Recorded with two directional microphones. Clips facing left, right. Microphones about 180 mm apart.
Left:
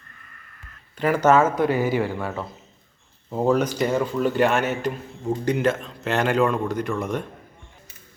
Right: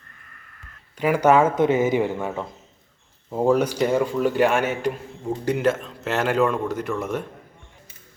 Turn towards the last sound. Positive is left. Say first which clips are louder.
# even
turn(degrees=-5)  # may be behind; listen again after turning